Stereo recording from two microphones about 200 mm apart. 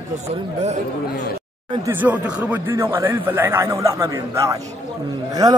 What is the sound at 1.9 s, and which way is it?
A man's voice, 10° right (ahead or behind).